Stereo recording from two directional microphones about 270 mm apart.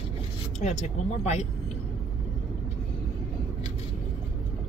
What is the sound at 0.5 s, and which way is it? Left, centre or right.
Speech, left.